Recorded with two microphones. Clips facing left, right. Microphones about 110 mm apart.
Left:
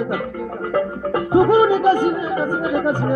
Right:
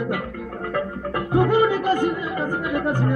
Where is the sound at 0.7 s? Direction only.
25° left (ahead or behind).